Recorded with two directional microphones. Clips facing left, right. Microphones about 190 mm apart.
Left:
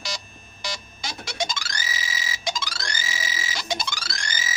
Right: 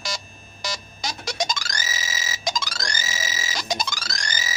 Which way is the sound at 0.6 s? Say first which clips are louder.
Right 3 dB; 40° right (ahead or behind).